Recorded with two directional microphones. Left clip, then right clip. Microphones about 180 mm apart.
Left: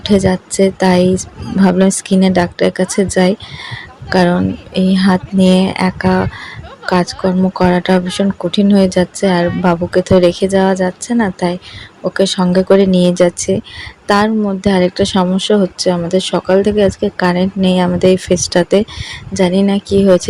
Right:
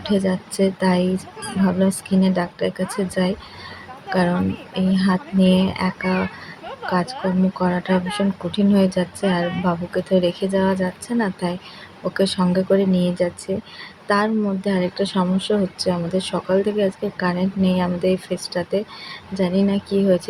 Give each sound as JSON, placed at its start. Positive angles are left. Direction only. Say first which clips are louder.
{"t": 0.0, "sound": "speech", "louder": "left 9 dB", "side_deg": 35}